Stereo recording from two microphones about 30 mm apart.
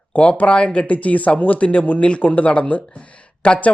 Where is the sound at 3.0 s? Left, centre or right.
Left.